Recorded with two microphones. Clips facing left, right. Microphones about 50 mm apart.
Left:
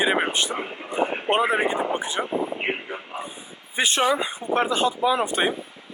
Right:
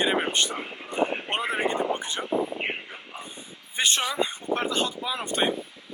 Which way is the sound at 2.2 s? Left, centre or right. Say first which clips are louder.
Left 2 dB; centre.